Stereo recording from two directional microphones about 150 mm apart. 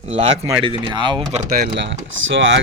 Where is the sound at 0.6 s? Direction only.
35° right (ahead or behind).